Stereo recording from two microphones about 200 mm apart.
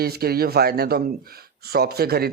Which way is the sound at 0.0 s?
50° right (ahead or behind).